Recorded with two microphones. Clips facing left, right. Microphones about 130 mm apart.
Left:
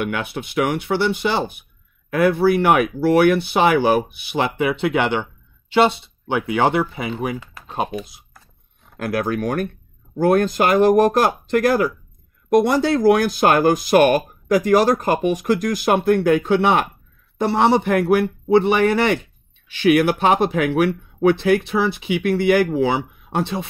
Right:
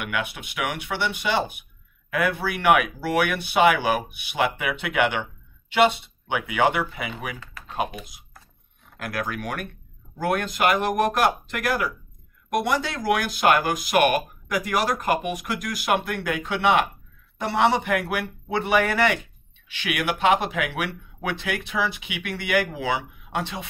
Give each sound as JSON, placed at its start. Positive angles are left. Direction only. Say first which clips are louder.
{"t": 0.0, "sound": "speech", "louder": "left 5 dB", "side_deg": 35}